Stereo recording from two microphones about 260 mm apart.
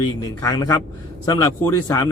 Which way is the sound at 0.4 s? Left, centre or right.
Centre.